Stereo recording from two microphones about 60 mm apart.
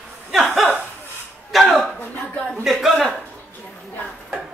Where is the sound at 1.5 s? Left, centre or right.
Centre.